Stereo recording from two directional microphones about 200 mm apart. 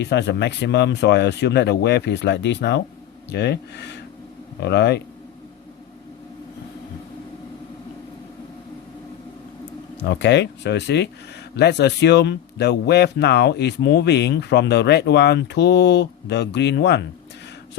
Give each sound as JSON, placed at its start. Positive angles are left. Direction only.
{"t": 0.0, "sound": "speech", "side_deg": 60}
{"t": 10.0, "sound": "speech", "side_deg": 60}